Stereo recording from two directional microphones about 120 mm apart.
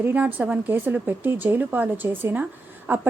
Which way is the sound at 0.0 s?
15° right (ahead or behind).